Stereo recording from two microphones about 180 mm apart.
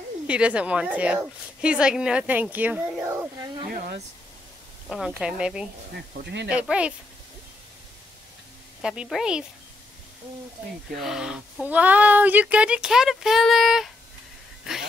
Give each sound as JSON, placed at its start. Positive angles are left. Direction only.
{"t": 0.3, "sound": "a woman's voice", "side_deg": -5}
{"t": 3.7, "sound": "speech", "side_deg": -55}
{"t": 4.8, "sound": "speech", "side_deg": 0}
{"t": 6.2, "sound": "speech", "side_deg": -75}
{"t": 6.5, "sound": "a woman's voice", "side_deg": -5}
{"t": 8.8, "sound": "speech", "side_deg": -5}
{"t": 11.0, "sound": "speech", "side_deg": -5}